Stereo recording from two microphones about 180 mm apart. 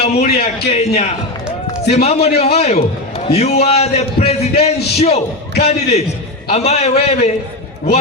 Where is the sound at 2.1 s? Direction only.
35° left (ahead or behind).